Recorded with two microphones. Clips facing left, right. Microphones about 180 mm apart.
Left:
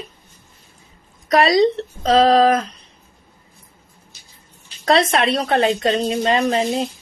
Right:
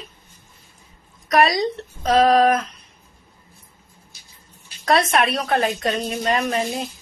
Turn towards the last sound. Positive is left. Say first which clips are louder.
# left 4 dB
turn(degrees=30)  # may be behind; listen again after turning